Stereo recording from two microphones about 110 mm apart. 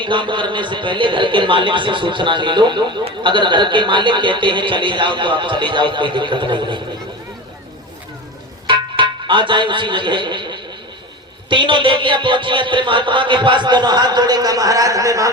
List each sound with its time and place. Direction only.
0.0 s a man's voice: 45° right (ahead or behind)
8.6 s music: 50° right (ahead or behind)
11.4 s a man's voice: 50° right (ahead or behind); by 15.3 s 30° right (ahead or behind)